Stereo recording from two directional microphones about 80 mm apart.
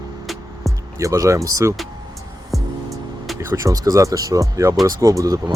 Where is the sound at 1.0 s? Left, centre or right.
Right.